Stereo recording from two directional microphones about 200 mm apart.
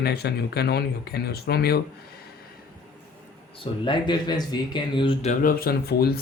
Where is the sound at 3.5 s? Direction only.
25° left (ahead or behind).